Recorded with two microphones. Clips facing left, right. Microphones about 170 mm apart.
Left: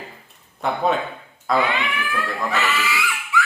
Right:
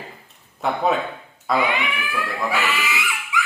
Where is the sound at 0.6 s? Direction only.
Centre (ahead or behind).